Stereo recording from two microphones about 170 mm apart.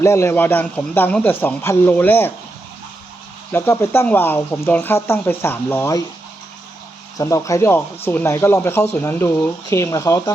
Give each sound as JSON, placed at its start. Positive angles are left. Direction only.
{"t": 0.0, "sound": "speech", "side_deg": 15}
{"t": 3.5, "sound": "speech", "side_deg": 15}
{"t": 7.2, "sound": "speech", "side_deg": 20}